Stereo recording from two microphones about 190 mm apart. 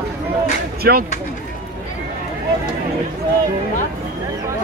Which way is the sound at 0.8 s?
55° right (ahead or behind).